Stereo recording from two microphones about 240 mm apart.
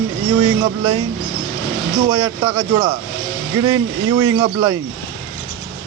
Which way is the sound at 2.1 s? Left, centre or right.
Centre.